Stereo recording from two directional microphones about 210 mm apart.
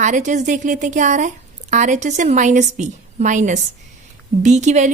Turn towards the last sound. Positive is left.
turn(degrees=-35)  # may be behind; listen again after turning